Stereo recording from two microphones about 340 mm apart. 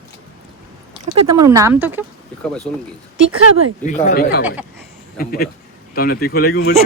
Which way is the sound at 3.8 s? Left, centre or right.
Left.